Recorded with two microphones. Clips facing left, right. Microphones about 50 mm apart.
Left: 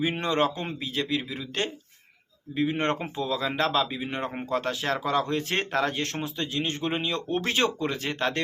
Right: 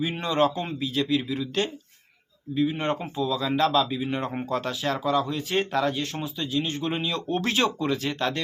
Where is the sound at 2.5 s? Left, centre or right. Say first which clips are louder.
Right 1 dB; left.